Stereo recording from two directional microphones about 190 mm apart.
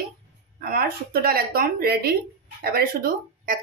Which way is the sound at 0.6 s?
50° right (ahead or behind).